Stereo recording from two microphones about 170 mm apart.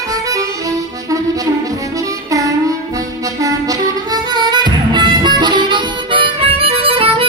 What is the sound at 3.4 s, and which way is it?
Music, 20° right (ahead or behind).